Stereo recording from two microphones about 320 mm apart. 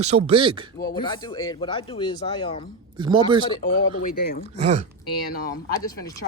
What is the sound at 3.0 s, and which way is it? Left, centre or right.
Speech, centre.